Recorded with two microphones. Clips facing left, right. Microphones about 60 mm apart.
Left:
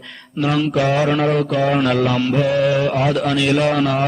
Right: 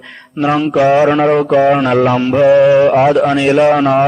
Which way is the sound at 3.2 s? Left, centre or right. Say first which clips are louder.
Right 6 dB; right.